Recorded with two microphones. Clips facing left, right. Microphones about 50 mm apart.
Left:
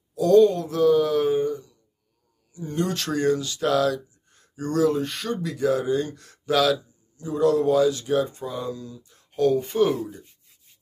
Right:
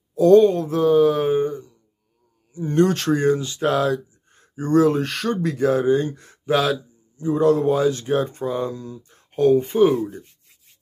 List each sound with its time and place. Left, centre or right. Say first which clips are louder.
0.1 s a sound: right 3 dB; right
2.7 s speech: right 8 dB; right
3.0 s speech: right 4 dB; right
4.9 s speech: right 4 dB; right
5.3 s speech: right 3 dB; right